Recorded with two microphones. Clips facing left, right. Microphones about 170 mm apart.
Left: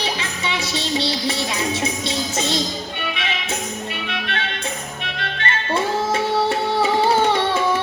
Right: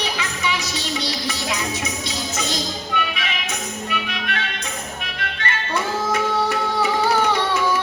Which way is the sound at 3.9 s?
30° left (ahead or behind).